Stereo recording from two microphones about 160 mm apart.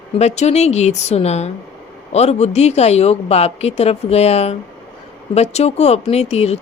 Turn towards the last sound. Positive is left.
turn(degrees=40)  # may be behind; listen again after turning